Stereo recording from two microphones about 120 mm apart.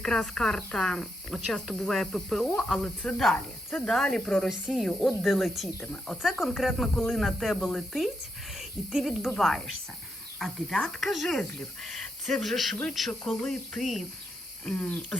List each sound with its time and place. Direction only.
0.0 s speech: 5° left (ahead or behind)
4.6 s speech: 5° right (ahead or behind)
14.7 s speech: 15° left (ahead or behind)